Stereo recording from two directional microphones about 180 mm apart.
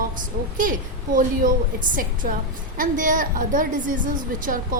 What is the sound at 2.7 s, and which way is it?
A woman's voice, 45° right (ahead or behind).